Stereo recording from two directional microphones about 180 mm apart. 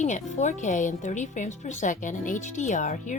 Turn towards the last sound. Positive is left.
turn(degrees=45)  # may be behind; listen again after turning